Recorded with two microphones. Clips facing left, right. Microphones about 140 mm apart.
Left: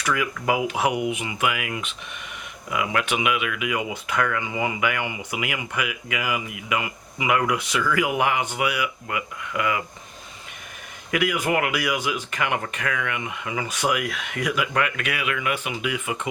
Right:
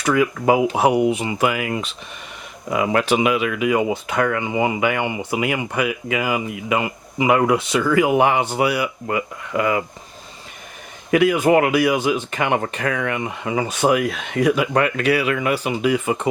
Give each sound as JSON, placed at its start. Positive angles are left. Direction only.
{"t": 0.0, "sound": "speech", "side_deg": -30}
{"t": 11.1, "sound": "speech", "side_deg": -30}